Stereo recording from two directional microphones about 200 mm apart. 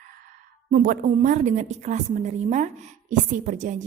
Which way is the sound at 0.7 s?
45° right (ahead or behind).